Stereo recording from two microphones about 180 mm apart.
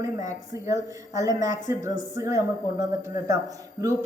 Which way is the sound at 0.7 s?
20° right (ahead or behind).